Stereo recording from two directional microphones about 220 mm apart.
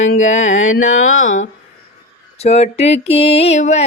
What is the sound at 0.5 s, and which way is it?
Music, 65° left (ahead or behind).